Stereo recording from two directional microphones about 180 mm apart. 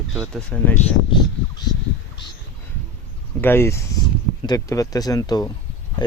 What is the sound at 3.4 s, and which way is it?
Speech, 10° left (ahead or behind).